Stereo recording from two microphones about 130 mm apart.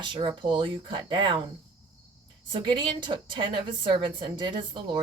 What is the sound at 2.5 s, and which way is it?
A woman's voice, 40° right (ahead or behind).